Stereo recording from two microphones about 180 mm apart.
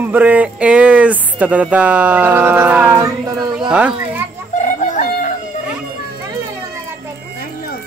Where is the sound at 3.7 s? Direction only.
5° right (ahead or behind).